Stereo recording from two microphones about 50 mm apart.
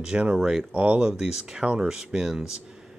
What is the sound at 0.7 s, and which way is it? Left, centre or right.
Speech, right.